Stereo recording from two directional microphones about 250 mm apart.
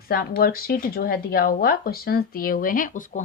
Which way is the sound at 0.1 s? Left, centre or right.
Left.